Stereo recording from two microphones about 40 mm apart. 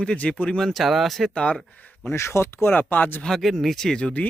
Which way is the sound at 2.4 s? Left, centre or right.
Left.